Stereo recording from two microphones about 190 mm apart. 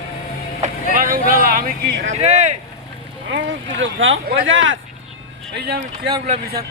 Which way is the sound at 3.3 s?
85° right.